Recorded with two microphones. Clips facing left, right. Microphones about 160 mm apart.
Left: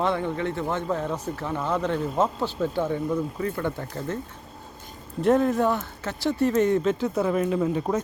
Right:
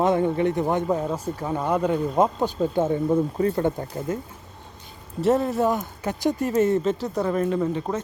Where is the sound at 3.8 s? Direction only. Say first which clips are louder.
Right 2 dB; 15° right (ahead or behind).